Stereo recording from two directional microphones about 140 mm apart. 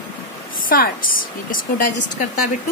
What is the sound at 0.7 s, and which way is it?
A woman's voice, 85° left.